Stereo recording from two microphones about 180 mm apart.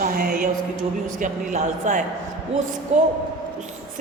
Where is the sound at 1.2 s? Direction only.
45° right (ahead or behind).